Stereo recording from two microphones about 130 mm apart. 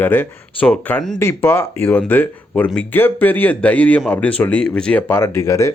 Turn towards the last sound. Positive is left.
turn(degrees=20)  # may be behind; listen again after turning